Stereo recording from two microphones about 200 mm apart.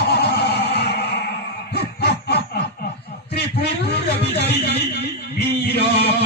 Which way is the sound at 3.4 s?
55° left (ahead or behind).